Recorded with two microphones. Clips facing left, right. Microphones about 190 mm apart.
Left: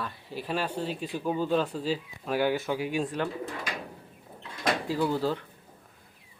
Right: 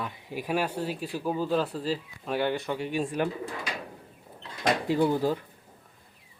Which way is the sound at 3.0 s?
10° right (ahead or behind).